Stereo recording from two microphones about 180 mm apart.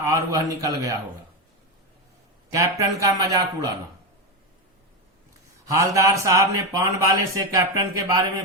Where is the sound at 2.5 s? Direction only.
20° right (ahead or behind).